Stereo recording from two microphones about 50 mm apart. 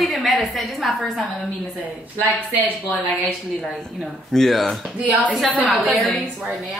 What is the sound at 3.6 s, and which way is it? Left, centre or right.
Speech, centre.